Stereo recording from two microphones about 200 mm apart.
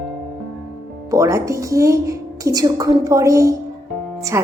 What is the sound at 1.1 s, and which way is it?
A woman's voice, 15° right (ahead or behind).